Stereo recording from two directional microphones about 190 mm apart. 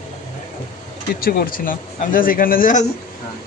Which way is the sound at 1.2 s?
50° left (ahead or behind).